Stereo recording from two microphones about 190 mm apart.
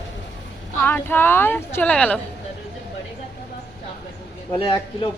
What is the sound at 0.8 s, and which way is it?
Speech, 10° left (ahead or behind).